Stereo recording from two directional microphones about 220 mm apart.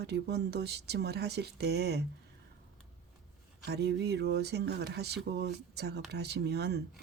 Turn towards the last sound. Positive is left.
turn(degrees=-50)  # may be behind; listen again after turning